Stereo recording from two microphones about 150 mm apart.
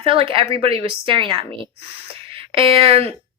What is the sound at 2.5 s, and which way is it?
Speech, 40° right (ahead or behind).